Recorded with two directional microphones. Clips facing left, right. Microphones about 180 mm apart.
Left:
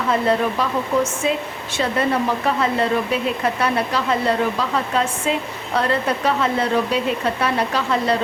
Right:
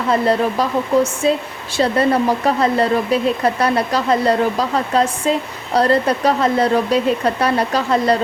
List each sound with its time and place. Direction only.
0.1 s speech: 35° right (ahead or behind)